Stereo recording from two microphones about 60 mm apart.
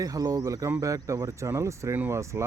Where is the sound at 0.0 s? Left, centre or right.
Right.